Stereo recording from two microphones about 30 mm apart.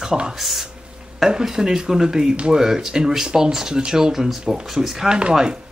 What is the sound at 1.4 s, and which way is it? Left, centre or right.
Speech, centre.